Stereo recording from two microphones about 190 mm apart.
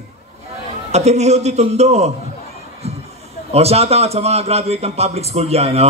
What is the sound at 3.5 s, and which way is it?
A man's voice, 35° right (ahead or behind).